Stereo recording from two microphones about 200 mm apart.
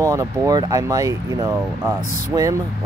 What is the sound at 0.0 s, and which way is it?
Speech, 15° right (ahead or behind).